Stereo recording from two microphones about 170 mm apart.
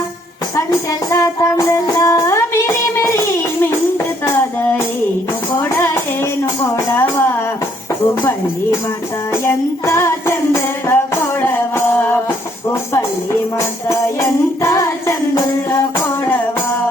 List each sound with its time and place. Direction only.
1.1 s music: 20° left (ahead or behind)
9.4 s music: 15° left (ahead or behind)
14.6 s music: 15° left (ahead or behind)